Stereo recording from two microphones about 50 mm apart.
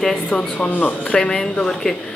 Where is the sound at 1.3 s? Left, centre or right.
Centre.